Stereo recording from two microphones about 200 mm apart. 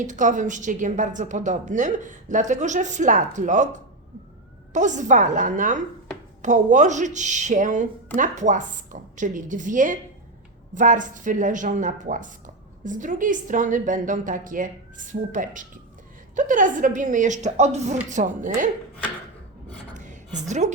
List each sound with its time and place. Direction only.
0.0 s a woman's voice: 40° right (ahead or behind)
20.1 s a woman's voice: 35° right (ahead or behind)